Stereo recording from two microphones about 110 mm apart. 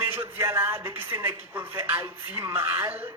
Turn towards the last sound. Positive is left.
turn(degrees=-20)  # may be behind; listen again after turning